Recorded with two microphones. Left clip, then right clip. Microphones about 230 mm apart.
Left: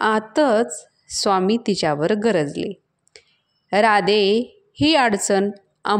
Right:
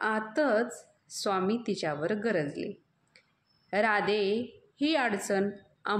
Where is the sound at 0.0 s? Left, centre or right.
Left.